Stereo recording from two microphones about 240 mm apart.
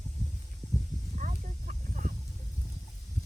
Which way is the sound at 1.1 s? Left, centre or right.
Right.